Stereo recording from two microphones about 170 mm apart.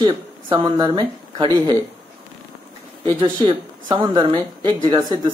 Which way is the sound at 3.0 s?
30° right (ahead or behind).